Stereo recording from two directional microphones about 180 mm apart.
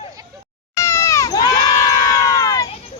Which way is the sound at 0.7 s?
15° left (ahead or behind).